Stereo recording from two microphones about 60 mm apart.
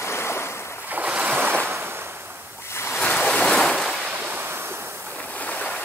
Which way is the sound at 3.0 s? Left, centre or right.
Centre.